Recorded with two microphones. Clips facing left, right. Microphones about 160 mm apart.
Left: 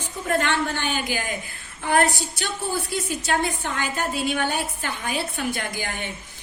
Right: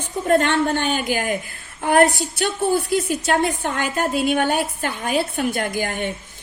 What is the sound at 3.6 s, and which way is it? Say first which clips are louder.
A woman's voice: right 5 dB; 50° right (ahead or behind).